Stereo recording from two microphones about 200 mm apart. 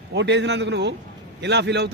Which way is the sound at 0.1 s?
60° right (ahead or behind).